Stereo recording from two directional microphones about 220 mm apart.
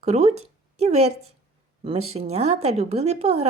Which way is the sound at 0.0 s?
30° right (ahead or behind).